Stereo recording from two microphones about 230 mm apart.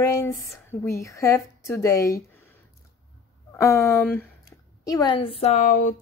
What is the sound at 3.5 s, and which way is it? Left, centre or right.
A woman's voice, centre.